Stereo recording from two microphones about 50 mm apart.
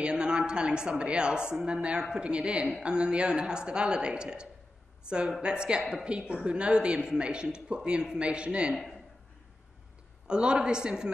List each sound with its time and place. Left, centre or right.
0.0 s a woman's voice: centre
10.2 s a woman's voice: centre